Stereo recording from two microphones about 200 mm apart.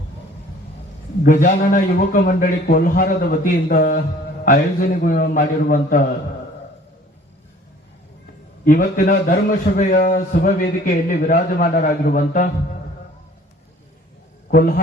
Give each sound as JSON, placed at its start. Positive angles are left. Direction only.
{"t": 1.2, "sound": "a man's voice", "side_deg": 40}
{"t": 8.6, "sound": "a man's voice", "side_deg": 40}
{"t": 14.5, "sound": "a man's voice", "side_deg": 50}